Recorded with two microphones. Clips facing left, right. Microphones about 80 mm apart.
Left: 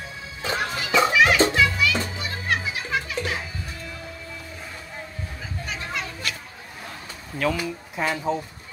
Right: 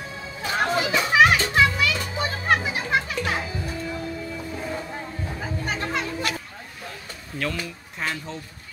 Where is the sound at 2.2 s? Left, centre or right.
Right.